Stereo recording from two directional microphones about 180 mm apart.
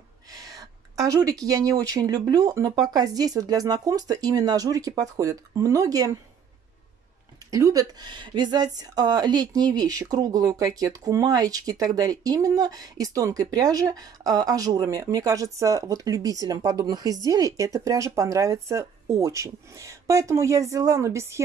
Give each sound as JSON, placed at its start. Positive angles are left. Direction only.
{"t": 0.3, "sound": "a woman's voice", "side_deg": -20}
{"t": 7.5, "sound": "a woman's voice", "side_deg": -20}